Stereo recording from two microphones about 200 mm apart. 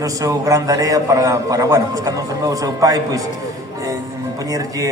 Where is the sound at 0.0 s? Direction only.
15° right (ahead or behind).